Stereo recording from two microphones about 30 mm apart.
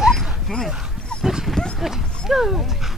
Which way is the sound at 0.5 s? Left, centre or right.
Left.